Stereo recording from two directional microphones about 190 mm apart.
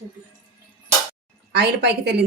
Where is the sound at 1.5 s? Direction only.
60° right (ahead or behind).